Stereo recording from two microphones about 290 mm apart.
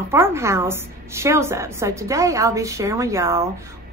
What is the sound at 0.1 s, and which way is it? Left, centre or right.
A woman's voice, centre.